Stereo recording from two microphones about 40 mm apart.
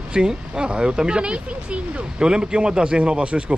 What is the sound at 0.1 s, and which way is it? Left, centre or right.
Speech, right.